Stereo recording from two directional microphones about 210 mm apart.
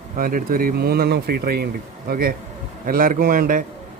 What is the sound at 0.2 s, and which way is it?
A man's voice, 45° right (ahead or behind).